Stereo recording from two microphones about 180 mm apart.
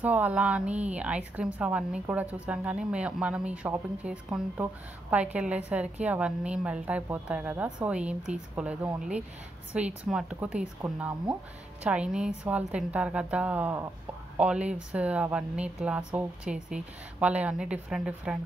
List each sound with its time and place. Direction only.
0.0 s a woman's voice: 10° right (ahead or behind)